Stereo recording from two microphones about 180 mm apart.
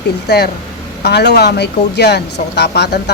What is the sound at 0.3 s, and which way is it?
Speech, 60° left (ahead or behind).